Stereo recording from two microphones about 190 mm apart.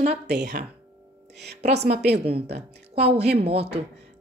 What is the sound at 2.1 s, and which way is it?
A woman's voice, 30° right (ahead or behind).